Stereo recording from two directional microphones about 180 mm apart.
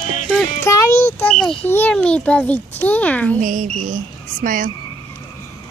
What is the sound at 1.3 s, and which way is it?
A child's voice, 5° left (ahead or behind).